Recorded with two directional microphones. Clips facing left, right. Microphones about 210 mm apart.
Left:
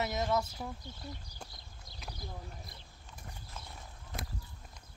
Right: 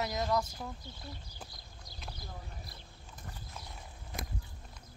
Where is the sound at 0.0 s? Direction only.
Centre (ahead or behind).